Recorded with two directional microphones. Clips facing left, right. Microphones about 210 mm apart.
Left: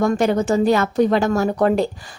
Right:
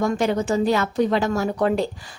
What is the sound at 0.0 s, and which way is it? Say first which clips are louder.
A woman's voice: left 4 dB; 50° left (ahead or behind).